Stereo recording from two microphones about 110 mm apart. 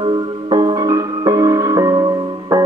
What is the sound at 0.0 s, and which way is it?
Music, 40° right (ahead or behind).